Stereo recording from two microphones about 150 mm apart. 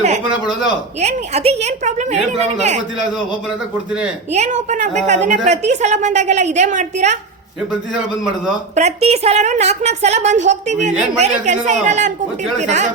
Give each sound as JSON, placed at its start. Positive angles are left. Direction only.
{"t": 0.9, "sound": "a woman's voice", "side_deg": -45}
{"t": 4.3, "sound": "a woman's voice", "side_deg": -50}
{"t": 8.7, "sound": "a woman's voice", "side_deg": -45}